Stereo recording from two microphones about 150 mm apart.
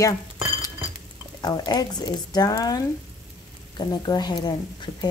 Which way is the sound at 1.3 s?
25° left (ahead or behind).